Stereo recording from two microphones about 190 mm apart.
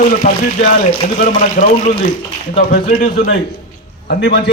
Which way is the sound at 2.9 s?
50° left (ahead or behind).